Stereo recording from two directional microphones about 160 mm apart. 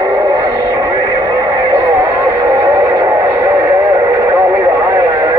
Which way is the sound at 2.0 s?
20° right (ahead or behind).